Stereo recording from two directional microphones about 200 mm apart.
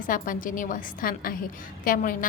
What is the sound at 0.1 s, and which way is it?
A woman's voice, 40° left (ahead or behind).